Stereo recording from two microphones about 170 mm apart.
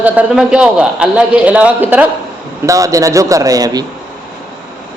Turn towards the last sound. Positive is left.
turn(degrees=-20)  # may be behind; listen again after turning